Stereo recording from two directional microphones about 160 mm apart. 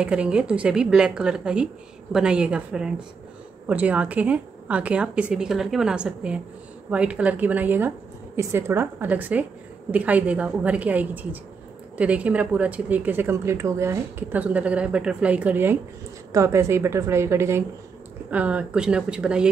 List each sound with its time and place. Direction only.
0.0 s a woman's voice: 5° right (ahead or behind)